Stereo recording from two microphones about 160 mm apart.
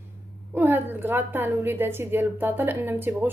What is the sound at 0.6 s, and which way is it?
A woman's voice, 10° right (ahead or behind).